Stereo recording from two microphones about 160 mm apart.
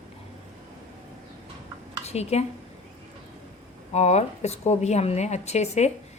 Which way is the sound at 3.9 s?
45° left (ahead or behind).